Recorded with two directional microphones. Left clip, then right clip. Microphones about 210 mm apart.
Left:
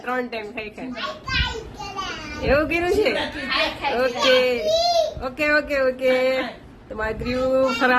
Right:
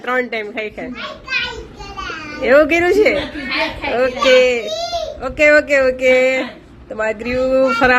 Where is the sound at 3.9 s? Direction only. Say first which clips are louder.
Right 7 dB; 10° right (ahead or behind).